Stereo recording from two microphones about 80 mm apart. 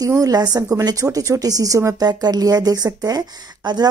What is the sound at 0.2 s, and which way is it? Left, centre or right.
A woman's voice, right.